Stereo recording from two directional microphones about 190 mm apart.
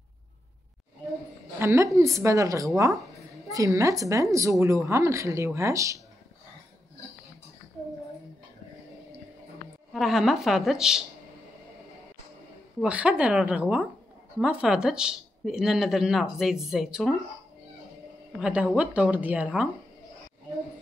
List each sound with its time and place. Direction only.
1.6 s a woman's voice: 15° right (ahead or behind)
9.9 s speech: centre (ahead or behind)
12.8 s a woman's voice: 5° right (ahead or behind)
18.4 s a woman's voice: 5° right (ahead or behind)